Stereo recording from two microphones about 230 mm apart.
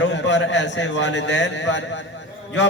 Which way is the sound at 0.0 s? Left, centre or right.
Left.